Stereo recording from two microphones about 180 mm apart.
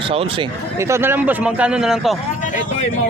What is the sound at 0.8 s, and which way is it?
A man's voice, 15° right (ahead or behind).